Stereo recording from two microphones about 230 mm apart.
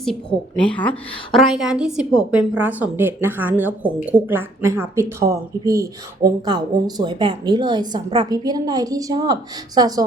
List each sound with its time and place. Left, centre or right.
0.0 s a woman's voice: centre